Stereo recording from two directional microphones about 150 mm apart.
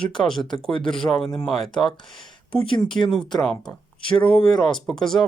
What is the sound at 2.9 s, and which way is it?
Speech, 15° left (ahead or behind).